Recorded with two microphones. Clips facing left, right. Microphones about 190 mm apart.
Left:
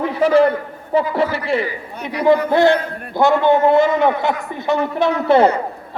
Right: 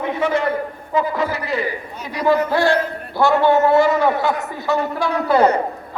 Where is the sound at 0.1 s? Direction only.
30° left (ahead or behind).